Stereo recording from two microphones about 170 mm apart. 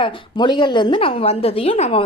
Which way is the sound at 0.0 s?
25° left (ahead or behind).